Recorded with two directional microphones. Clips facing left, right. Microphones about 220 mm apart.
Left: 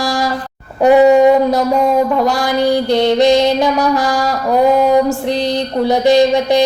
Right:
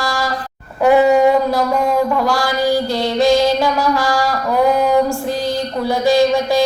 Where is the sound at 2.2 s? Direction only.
20° left (ahead or behind).